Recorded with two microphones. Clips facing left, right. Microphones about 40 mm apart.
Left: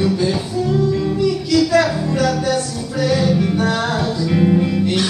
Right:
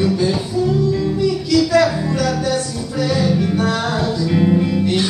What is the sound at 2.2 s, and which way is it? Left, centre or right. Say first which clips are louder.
Music: left 2 dB; left.